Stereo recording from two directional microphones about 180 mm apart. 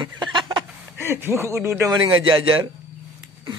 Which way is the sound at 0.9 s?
10° right (ahead or behind).